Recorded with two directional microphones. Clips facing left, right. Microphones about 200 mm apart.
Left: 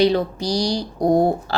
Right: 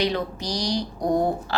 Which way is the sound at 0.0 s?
30° left (ahead or behind).